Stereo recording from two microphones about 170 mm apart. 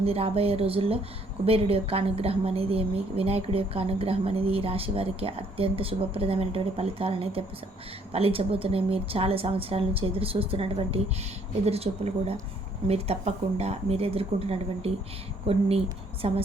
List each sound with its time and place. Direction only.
0.0 s a woman's voice: 35° right (ahead or behind)